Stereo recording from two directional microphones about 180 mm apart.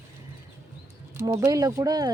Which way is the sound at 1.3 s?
15° right (ahead or behind).